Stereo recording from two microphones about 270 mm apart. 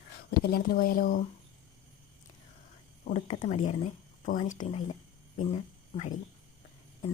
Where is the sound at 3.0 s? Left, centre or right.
Left.